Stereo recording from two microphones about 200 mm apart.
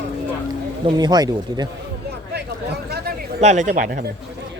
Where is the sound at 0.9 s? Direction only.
20° right (ahead or behind).